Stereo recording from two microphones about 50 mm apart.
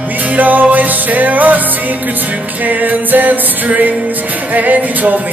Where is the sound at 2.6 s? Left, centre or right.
Right.